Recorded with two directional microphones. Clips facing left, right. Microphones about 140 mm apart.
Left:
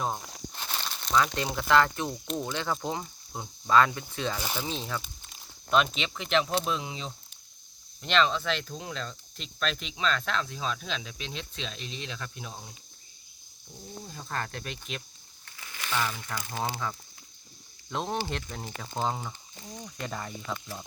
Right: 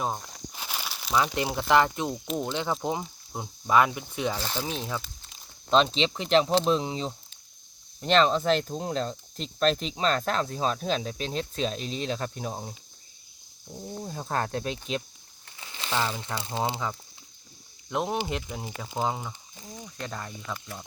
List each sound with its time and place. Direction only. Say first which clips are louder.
0.0 s crumpling: right 1 dB; centre (ahead or behind)
1.5 s speech: right 1 dB; 20° right (ahead or behind)
2.2 s speech: right 3 dB; 5° right (ahead or behind)
2.5 s speech: right 3 dB; 15° right (ahead or behind)
5.7 s speech: right 4 dB; 30° right (ahead or behind)
14.0 s speech: right 6 dB; 45° right (ahead or behind); by 17.0 s 25° right (ahead or behind)
17.9 s speech: right 3 dB; 10° right (ahead or behind)